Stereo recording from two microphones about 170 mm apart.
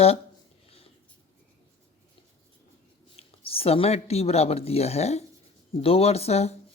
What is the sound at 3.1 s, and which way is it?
Speech, 35° left (ahead or behind).